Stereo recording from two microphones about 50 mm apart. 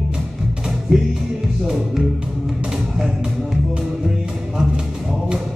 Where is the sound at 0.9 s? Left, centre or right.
Centre.